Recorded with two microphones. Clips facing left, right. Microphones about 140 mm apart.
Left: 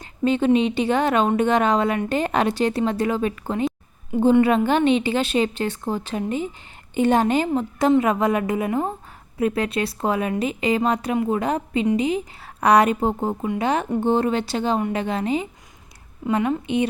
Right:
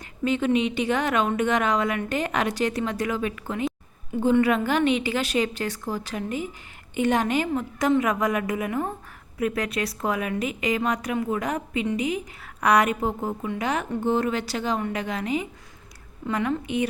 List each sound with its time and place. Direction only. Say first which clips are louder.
0.0 s a woman's voice: left 4 dB; 30° left (ahead or behind)